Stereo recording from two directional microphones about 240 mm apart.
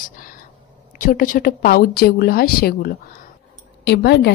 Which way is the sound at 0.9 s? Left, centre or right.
Left.